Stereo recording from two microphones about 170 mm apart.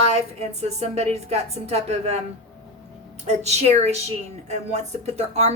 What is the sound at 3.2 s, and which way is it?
A woman's voice, 40° right (ahead or behind).